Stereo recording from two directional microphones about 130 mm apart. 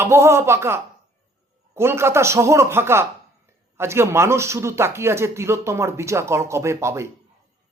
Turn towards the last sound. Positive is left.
turn(degrees=-20)  # may be behind; listen again after turning